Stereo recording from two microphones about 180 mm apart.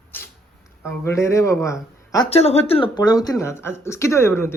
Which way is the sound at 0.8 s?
15° left (ahead or behind).